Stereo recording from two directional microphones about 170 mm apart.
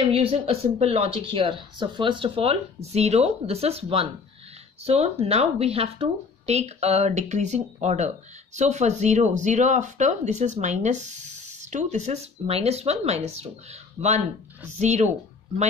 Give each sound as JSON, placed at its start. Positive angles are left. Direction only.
{"t": 0.0, "sound": "speech", "side_deg": -35}